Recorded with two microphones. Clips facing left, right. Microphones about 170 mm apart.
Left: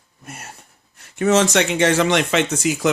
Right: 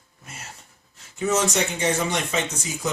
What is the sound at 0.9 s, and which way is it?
Speech, 65° left (ahead or behind).